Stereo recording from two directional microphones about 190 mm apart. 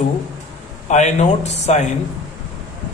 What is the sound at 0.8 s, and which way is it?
A man's voice, 40° left (ahead or behind).